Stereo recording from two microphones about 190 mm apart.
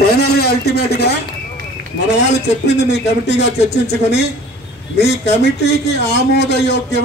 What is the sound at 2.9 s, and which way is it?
Speech, 65° left (ahead or behind).